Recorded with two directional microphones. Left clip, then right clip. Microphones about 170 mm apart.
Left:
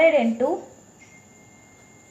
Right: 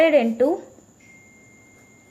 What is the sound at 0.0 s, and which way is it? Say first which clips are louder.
Speech: right 1 dB; 45° right (ahead or behind).